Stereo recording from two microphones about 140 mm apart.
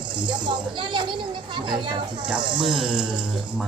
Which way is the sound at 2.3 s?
35° right (ahead or behind).